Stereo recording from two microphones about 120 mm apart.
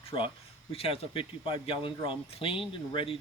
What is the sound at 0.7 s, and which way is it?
Speech, 55° left (ahead or behind).